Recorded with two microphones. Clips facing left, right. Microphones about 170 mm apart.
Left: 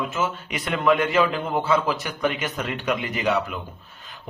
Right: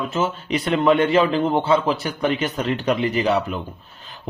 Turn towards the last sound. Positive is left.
turn(degrees=-30)  # may be behind; listen again after turning